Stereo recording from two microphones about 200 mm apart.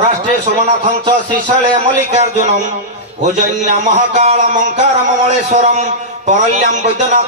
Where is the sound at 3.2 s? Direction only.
35° right (ahead or behind).